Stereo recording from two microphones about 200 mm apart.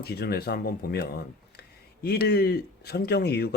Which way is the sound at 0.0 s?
50° left (ahead or behind).